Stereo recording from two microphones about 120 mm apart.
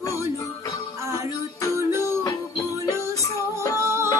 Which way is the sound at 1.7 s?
20° right (ahead or behind).